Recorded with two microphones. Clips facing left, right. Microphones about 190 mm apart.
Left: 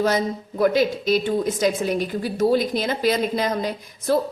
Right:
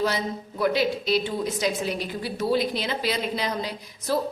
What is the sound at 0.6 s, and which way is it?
A woman's voice, 45° left (ahead or behind).